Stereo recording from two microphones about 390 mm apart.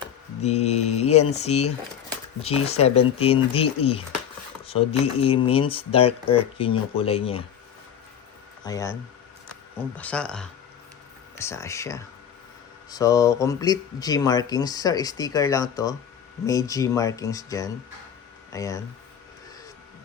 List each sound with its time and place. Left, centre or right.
0.4 s speech: centre
8.6 s speech: centre
10.0 s speech: centre